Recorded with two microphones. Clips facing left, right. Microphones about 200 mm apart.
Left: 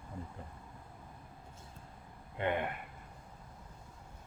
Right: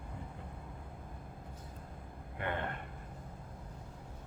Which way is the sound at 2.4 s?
15° left (ahead or behind).